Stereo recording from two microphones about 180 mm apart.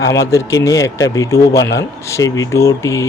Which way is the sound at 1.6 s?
90° left.